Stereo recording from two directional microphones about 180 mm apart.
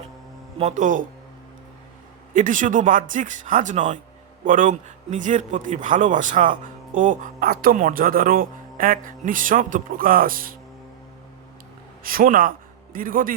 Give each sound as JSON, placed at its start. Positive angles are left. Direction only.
{"t": 0.6, "sound": "speech", "side_deg": -45}
{"t": 2.3, "sound": "speech", "side_deg": -45}
{"t": 12.0, "sound": "a man's voice", "side_deg": -50}